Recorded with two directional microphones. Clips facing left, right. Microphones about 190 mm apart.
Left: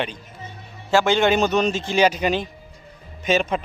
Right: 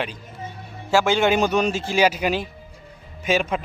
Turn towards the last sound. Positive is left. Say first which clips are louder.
# left 1 dB
turn(degrees=-10)  # may be behind; listen again after turning